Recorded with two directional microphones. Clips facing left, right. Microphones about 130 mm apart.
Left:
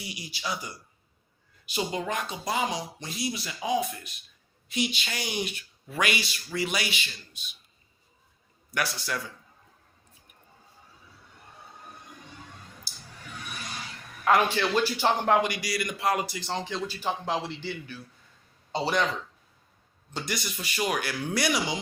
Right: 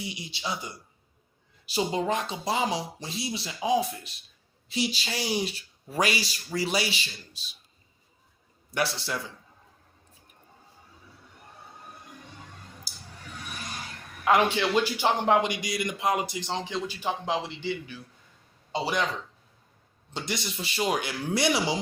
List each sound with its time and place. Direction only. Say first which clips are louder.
0.0 s a man's voice: right 1 dB; 25° right (ahead or behind)
8.7 s a man's voice: right 2 dB; 30° right (ahead or behind)
12.9 s a sound: even; 10° right (ahead or behind)
14.3 s a man's voice: right 1 dB; 20° right (ahead or behind)
20.1 s a man's voice: right 1 dB; 25° right (ahead or behind)